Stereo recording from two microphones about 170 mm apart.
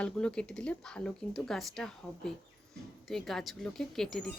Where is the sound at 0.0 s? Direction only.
5° left (ahead or behind).